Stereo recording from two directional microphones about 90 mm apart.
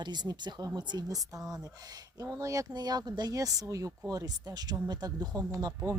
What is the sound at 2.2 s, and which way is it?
Speech, 35° right (ahead or behind).